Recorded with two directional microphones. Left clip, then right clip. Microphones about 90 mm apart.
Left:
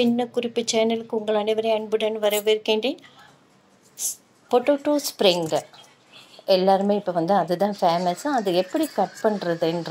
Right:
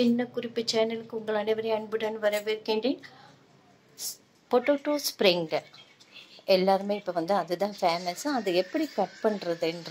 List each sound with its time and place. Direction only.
0.0 s speech: 25° left (ahead or behind)
6.4 s a woman's voice: 15° left (ahead or behind)